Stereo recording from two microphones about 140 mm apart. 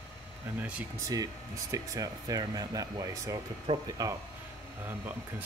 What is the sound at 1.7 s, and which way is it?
Speech, 25° right (ahead or behind).